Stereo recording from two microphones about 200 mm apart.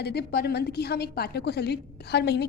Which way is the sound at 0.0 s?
55° left (ahead or behind).